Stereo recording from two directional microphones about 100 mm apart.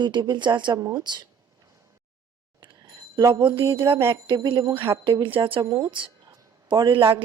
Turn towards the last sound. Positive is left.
turn(degrees=-55)  # may be behind; listen again after turning